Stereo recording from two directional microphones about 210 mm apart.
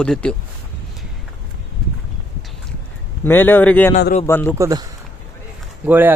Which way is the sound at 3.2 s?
10° left (ahead or behind).